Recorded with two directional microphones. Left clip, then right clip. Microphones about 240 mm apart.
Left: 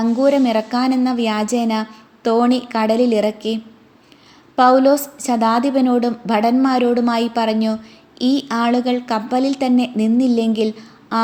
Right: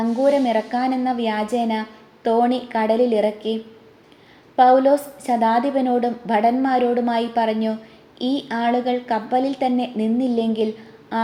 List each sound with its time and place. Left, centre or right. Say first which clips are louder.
0.0 s speech: left 2 dB; left